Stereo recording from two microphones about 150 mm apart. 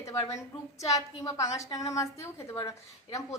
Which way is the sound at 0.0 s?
20° left (ahead or behind).